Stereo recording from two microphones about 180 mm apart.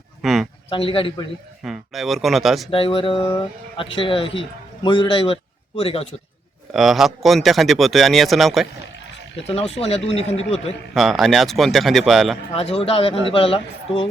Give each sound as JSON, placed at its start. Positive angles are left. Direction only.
{"t": 0.2, "sound": "a sound", "side_deg": 0}
{"t": 0.7, "sound": "speech", "side_deg": 30}
{"t": 1.6, "sound": "speech", "side_deg": 0}
{"t": 2.6, "sound": "a man's voice", "side_deg": 30}
{"t": 6.7, "sound": "speech", "side_deg": 0}
{"t": 9.8, "sound": "a woman's voice", "side_deg": 35}
{"t": 10.9, "sound": "speech", "side_deg": 0}
{"t": 12.5, "sound": "a woman's voice", "side_deg": 30}